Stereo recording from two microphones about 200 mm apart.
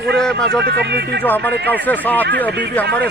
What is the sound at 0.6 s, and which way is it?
Speech, 55° right (ahead or behind).